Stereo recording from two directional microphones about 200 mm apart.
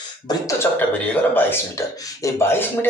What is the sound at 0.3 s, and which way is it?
Speech, 15° left (ahead or behind).